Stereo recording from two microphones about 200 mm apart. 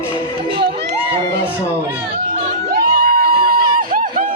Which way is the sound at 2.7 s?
45° right (ahead or behind).